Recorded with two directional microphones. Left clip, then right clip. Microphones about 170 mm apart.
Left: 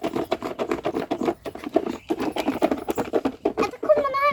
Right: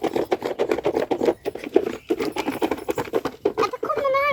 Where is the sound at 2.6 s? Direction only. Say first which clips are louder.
Left 1 dB; 25° left (ahead or behind).